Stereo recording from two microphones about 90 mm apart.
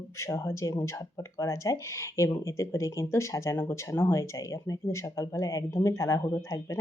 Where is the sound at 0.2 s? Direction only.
30° left (ahead or behind).